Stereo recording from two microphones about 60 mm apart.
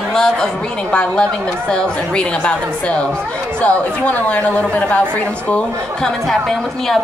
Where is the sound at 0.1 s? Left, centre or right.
Centre.